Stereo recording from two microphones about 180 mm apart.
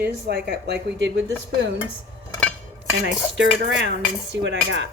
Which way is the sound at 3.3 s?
75° right (ahead or behind).